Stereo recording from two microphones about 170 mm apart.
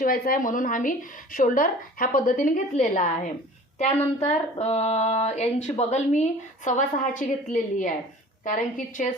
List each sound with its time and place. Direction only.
0.0 s a woman's voice: 55° left (ahead or behind)
3.8 s a sound: 45° left (ahead or behind)
6.7 s a woman's voice: 50° left (ahead or behind)